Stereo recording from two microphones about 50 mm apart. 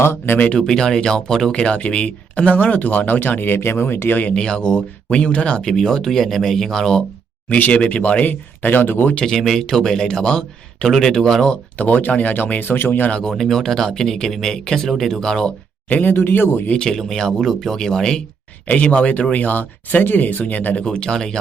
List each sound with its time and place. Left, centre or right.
0.0 s speech: left
0.7 s speech: centre
1.5 s speech: left
4.4 s speech: centre
5.6 s speech: centre
7.7 s speech: left
9.3 s speech: centre
11.8 s speech: left
13.3 s speech: centre
15.9 s speech: left
17.0 s speech: centre
18.7 s speech: left
20.8 s speech: centre